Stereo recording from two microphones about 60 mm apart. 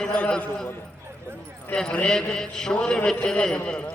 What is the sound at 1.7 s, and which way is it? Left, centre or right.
A man's voice, centre.